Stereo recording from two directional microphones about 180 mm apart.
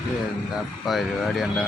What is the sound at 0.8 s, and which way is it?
Speech, centre (ahead or behind).